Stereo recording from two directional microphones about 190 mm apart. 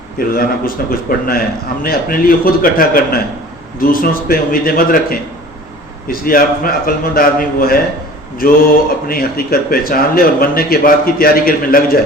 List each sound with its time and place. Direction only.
0.3 s a man's voice: 50° left (ahead or behind)
9.0 s a man's voice: 50° left (ahead or behind)